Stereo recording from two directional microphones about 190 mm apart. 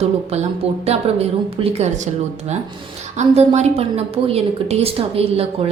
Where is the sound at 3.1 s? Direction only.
35° right (ahead or behind).